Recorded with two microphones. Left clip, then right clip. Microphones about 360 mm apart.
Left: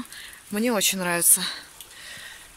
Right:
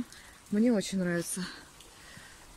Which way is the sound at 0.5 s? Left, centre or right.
Left.